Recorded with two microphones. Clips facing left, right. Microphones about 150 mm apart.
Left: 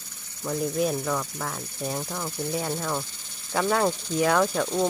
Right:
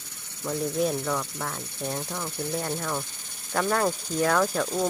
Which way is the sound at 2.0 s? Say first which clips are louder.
Left 1 dB; 15° left (ahead or behind).